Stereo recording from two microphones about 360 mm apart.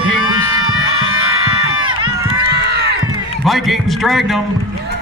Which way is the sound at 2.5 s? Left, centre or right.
Right.